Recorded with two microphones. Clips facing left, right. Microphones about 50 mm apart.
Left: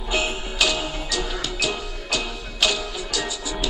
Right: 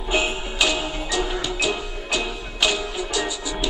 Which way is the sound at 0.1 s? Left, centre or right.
Centre.